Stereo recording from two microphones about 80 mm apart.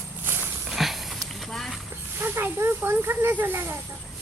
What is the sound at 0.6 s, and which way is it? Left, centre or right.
Horse, centre.